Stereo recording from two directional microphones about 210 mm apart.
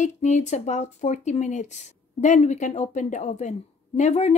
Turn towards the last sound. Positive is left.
turn(degrees=30)  # may be behind; listen again after turning